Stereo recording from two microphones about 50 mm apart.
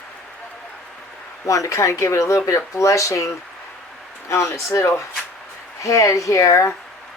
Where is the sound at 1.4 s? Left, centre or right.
Left.